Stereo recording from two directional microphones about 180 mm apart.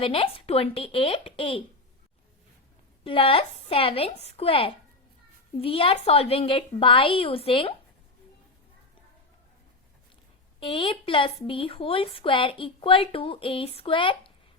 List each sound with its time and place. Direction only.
0.0 s a woman's voice: 30° left (ahead or behind)
3.0 s a woman's voice: 30° left (ahead or behind)
10.6 s a woman's voice: 30° left (ahead or behind)